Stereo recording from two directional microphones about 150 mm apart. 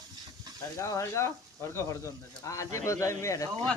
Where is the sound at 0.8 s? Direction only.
20° left (ahead or behind).